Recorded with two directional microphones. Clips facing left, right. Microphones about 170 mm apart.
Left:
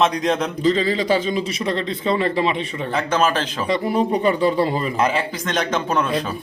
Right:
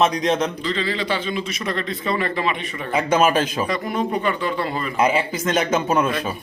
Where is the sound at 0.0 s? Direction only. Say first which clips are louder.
Even; centre (ahead or behind).